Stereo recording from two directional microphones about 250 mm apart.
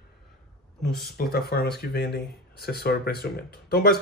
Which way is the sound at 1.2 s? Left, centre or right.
Left.